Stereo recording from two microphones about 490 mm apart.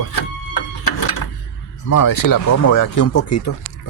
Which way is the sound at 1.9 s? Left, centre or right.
Left.